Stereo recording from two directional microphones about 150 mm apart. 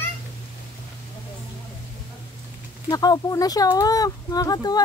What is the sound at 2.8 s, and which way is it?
Speech, 25° left (ahead or behind).